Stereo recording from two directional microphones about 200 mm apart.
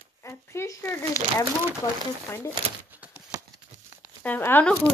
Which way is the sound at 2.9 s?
10° right (ahead or behind).